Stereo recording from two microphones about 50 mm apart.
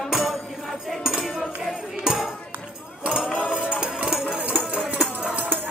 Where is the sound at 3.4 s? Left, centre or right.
Centre.